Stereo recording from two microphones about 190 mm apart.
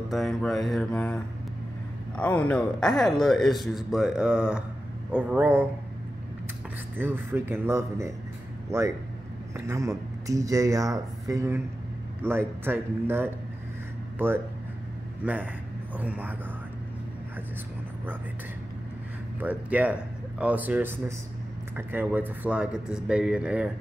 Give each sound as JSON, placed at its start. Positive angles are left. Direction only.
{"t": 0.1, "sound": "speech", "side_deg": 0}
{"t": 7.0, "sound": "speech", "side_deg": -10}
{"t": 9.7, "sound": "speech", "side_deg": -15}
{"t": 19.4, "sound": "speech", "side_deg": -10}